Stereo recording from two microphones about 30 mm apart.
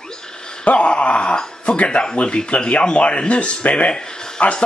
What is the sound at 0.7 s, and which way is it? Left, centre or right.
Speech, left.